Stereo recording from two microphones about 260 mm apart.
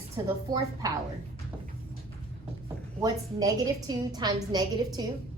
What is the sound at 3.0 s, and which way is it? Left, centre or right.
A woman's voice, centre.